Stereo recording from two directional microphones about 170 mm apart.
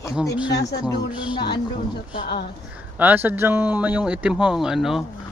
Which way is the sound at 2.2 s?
70° left (ahead or behind).